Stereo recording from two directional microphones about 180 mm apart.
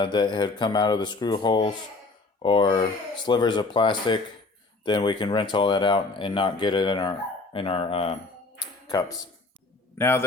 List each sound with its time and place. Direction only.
0.0 s speech: 25° left (ahead or behind)
8.9 s a man's voice: 20° left (ahead or behind)